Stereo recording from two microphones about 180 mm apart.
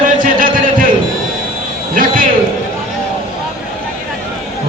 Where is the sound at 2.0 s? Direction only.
50° right (ahead or behind).